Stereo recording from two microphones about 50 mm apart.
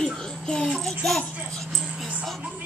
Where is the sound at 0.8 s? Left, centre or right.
Centre.